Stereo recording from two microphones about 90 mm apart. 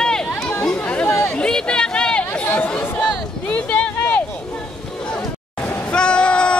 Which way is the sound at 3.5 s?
15° left (ahead or behind).